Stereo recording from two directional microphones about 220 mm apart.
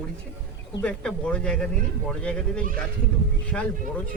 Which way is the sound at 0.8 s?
5° left (ahead or behind).